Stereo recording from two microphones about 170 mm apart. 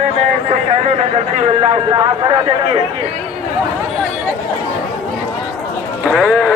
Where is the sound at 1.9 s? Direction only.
25° right (ahead or behind).